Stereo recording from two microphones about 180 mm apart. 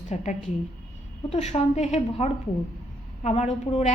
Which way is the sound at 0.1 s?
40° left (ahead or behind).